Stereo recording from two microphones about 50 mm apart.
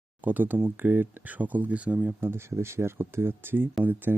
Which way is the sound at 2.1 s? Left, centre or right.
Right.